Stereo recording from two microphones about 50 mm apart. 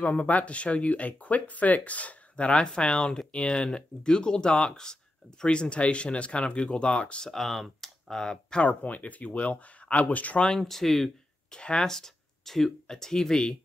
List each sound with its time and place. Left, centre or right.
0.0 s speech: left
7.2 s speech: centre
8.6 s speech: left
10.6 s speech: centre
11.5 s speech: centre